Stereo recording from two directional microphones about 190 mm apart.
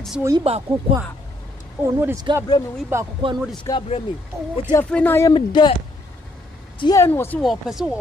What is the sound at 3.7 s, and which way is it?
Speech, 15° left (ahead or behind).